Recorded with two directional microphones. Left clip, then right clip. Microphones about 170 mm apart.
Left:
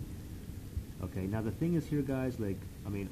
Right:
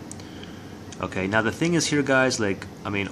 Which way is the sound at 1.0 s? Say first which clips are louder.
Right 16 dB; 5° right (ahead or behind).